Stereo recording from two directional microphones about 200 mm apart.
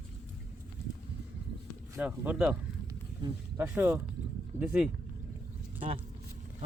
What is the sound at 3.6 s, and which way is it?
Speech, 10° right (ahead or behind).